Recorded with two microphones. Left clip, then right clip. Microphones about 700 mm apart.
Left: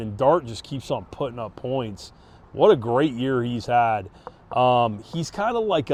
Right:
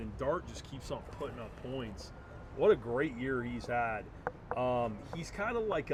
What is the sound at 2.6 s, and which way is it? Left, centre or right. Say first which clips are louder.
Speech: left 11 dB; left.